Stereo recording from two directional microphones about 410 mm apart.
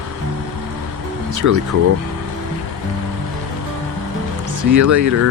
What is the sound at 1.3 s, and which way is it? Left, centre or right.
Speech, right.